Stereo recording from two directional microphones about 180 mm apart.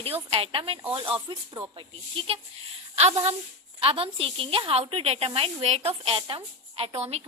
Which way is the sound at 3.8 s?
30° right (ahead or behind).